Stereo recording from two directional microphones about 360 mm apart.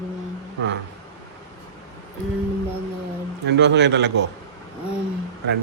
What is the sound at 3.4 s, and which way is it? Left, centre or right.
Speech, right.